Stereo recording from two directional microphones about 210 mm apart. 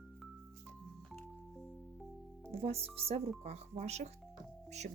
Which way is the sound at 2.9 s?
30° right (ahead or behind).